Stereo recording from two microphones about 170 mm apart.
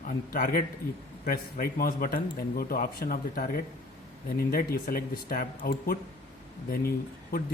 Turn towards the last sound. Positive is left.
turn(degrees=60)  # may be behind; listen again after turning